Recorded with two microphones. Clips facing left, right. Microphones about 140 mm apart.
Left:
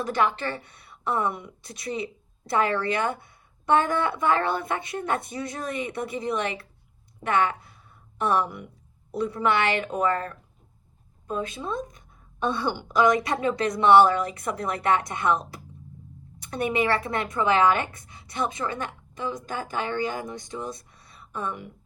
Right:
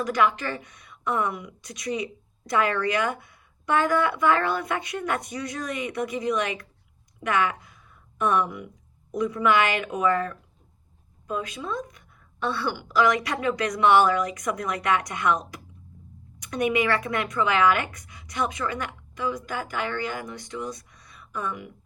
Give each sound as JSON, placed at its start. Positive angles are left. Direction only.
{"t": 0.0, "sound": "a woman's voice", "side_deg": 30}